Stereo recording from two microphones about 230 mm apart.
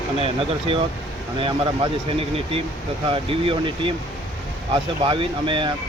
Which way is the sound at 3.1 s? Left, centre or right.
Right.